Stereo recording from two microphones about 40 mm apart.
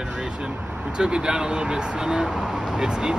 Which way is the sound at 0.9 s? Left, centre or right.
Right.